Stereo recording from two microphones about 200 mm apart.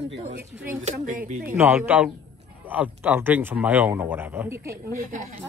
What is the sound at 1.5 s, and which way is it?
A man's voice, 10° right (ahead or behind).